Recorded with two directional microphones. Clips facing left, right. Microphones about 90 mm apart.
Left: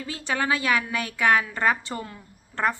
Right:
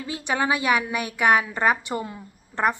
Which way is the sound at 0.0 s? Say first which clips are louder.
Right 2 dB; 15° right (ahead or behind).